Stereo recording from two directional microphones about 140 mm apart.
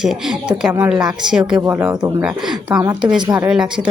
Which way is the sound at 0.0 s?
5° right (ahead or behind).